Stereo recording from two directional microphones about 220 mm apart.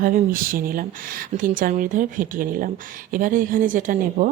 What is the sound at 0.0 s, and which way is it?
Speech, 40° right (ahead or behind).